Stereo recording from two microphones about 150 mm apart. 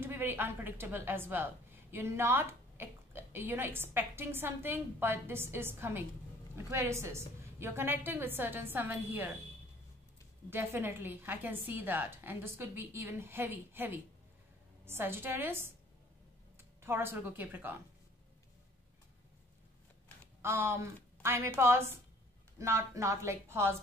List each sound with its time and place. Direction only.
0.0 s a woman's voice: 15° right (ahead or behind)
10.5 s a woman's voice: 15° right (ahead or behind)
20.4 s a woman's voice: 15° right (ahead or behind)